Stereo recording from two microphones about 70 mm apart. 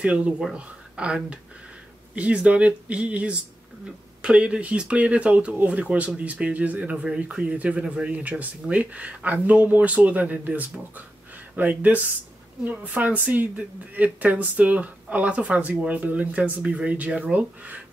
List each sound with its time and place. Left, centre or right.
0.0 s speech: centre